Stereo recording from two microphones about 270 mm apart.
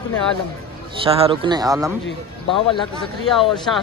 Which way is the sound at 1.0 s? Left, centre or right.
Centre.